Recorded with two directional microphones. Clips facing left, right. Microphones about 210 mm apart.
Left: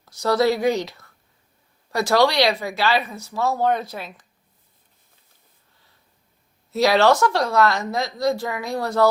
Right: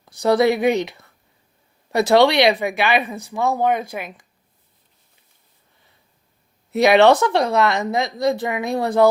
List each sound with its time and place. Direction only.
0.2 s speech: 20° right (ahead or behind)
6.7 s speech: 20° right (ahead or behind)